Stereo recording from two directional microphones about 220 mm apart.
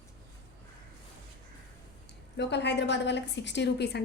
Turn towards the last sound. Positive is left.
turn(degrees=50)  # may be behind; listen again after turning